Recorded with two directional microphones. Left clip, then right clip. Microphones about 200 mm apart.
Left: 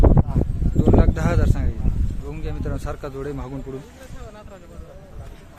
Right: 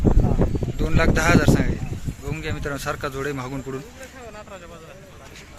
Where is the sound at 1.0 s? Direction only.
Centre (ahead or behind).